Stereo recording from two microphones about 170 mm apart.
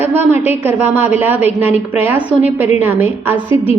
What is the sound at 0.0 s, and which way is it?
A woman's voice, 10° right (ahead or behind).